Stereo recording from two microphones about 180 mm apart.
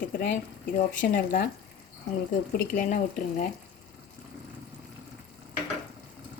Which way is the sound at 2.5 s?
45° left (ahead or behind).